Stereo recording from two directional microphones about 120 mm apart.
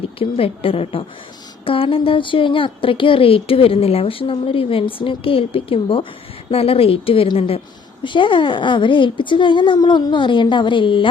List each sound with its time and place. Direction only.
0.2 s a woman's voice: 50° left (ahead or behind)